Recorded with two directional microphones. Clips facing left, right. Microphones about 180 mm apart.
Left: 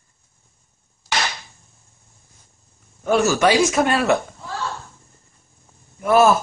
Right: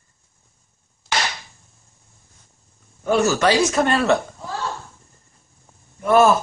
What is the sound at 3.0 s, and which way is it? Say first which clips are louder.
Speech: left 1 dB; 10° left (ahead or behind).